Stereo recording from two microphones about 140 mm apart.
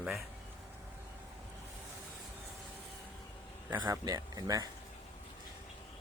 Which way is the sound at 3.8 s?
25° right (ahead or behind).